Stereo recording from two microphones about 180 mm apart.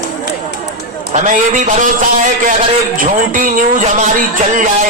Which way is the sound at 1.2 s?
45° right (ahead or behind).